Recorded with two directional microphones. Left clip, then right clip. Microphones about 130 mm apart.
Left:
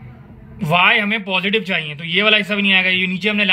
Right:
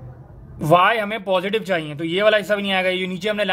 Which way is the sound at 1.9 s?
65° right (ahead or behind).